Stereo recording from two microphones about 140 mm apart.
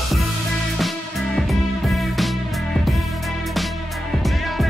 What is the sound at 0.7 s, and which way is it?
Music, centre (ahead or behind).